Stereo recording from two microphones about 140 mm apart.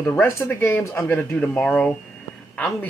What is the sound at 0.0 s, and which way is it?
Speech, 15° left (ahead or behind).